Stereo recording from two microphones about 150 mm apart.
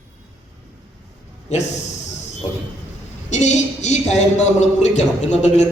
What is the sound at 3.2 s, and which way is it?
A woman's voice, 50° left (ahead or behind).